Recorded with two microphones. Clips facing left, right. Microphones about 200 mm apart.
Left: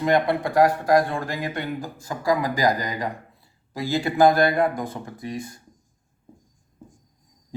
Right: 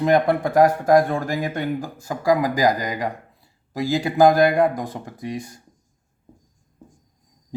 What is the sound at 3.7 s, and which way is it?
Speech, 45° right (ahead or behind).